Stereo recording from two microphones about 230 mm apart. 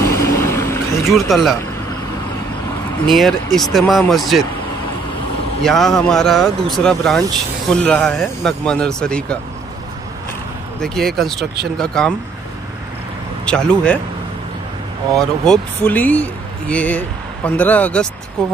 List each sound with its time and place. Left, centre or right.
0.0 s vehicle: centre
1.1 s speech: centre
3.1 s speech: centre
5.6 s speech: centre
10.8 s speech: centre
13.5 s speech: centre
15.1 s speech: centre